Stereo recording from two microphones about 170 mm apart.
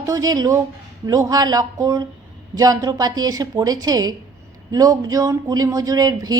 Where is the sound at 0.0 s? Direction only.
20° right (ahead or behind).